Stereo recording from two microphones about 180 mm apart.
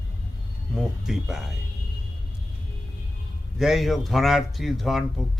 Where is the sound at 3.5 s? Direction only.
Centre (ahead or behind).